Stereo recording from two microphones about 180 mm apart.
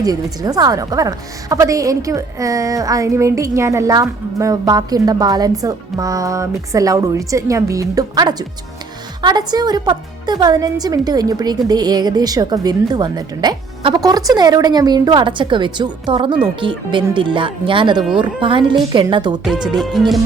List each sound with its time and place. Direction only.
0.0 s speech: 20° right (ahead or behind)
19.5 s music: 5° right (ahead or behind)